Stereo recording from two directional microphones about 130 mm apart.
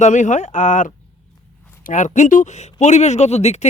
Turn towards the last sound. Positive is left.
turn(degrees=55)  # may be behind; listen again after turning